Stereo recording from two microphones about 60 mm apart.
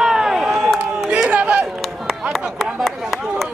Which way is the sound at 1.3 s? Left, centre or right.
Right.